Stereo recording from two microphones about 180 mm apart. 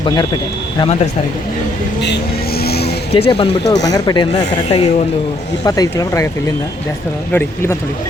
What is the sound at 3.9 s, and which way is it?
Speech, 20° left (ahead or behind).